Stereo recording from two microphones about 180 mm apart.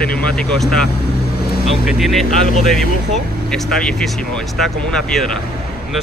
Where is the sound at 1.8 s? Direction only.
Centre (ahead or behind).